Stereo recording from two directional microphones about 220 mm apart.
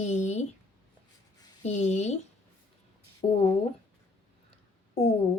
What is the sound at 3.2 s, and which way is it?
Speech, 25° left (ahead or behind).